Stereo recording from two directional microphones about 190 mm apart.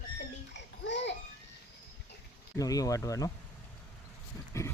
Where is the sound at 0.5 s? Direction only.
70° left (ahead or behind).